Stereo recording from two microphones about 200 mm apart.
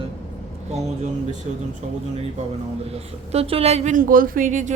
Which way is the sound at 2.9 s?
30° right (ahead or behind).